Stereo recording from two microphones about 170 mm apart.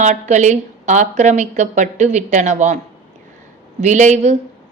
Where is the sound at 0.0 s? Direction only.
45° right (ahead or behind).